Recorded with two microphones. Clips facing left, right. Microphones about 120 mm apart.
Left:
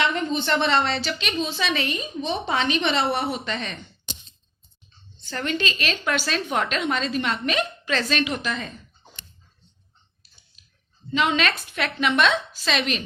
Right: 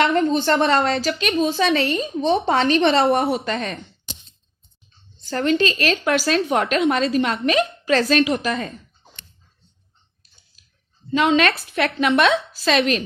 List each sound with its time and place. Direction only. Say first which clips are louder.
0.0 s a woman's voice: right 6 dB; 45° right (ahead or behind)
2.7 s a woman's voice: right 7 dB; 55° right (ahead or behind)
5.1 s speech: right 8 dB; 40° right (ahead or behind)
11.1 s speech: right 5 dB; 40° right (ahead or behind)